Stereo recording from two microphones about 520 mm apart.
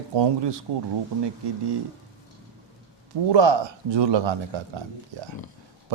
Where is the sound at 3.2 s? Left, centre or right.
Right.